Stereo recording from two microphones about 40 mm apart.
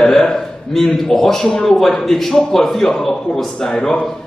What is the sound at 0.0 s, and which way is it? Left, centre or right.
A man's voice, centre.